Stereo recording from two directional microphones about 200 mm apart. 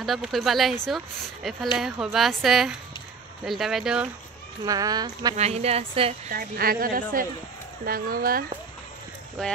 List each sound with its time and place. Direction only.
0.0 s speech: centre (ahead or behind)
4.6 s speech: 20° right (ahead or behind)
5.3 s speech: 30° right (ahead or behind)
6.3 s a woman's voice: 50° right (ahead or behind)
9.4 s speech: 5° left (ahead or behind)